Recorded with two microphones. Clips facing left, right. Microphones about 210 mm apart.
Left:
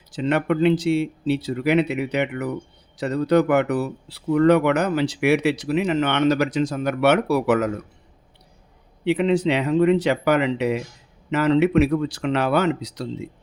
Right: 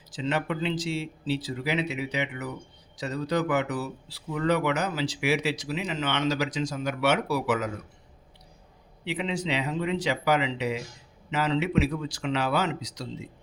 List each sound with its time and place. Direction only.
0.1 s speech: 60° left (ahead or behind)
9.0 s speech: 60° left (ahead or behind)